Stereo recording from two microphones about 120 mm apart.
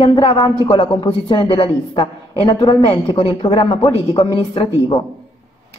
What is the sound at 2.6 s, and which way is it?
Speech, 35° left (ahead or behind).